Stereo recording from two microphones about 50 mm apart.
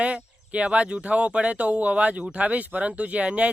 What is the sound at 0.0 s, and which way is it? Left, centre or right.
Speech, right.